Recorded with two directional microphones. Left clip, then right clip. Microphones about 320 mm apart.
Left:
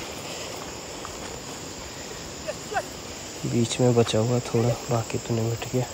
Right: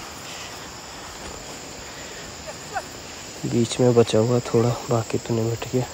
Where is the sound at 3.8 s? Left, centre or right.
Right.